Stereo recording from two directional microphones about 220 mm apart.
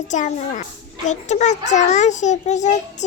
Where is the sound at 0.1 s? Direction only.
35° left (ahead or behind).